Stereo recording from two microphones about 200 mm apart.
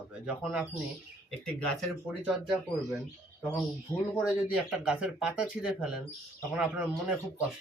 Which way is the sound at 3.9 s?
10° left (ahead or behind).